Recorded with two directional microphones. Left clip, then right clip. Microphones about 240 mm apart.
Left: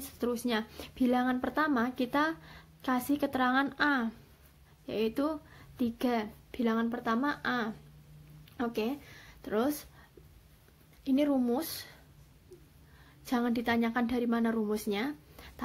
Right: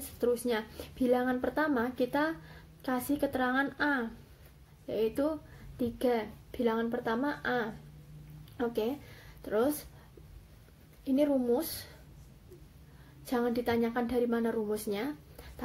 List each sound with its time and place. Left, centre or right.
0.2 s speech: left
11.1 s speech: left
13.2 s speech: left